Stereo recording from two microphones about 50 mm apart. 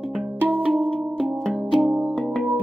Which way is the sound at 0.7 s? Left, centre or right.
Centre.